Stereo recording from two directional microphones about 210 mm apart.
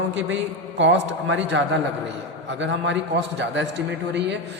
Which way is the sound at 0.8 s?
60° right (ahead or behind).